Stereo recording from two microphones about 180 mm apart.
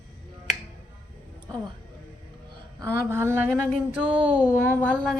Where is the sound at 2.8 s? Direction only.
15° right (ahead or behind).